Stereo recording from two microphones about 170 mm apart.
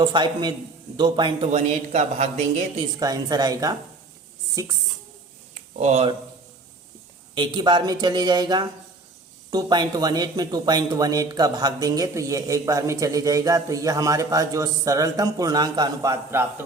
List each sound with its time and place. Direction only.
0.0 s speech: 25° right (ahead or behind)
1.4 s a woman's voice: 40° right (ahead or behind)
3.0 s speech: 25° right (ahead or behind)
5.5 s a sound: 45° right (ahead or behind)
7.3 s speech: 25° right (ahead or behind)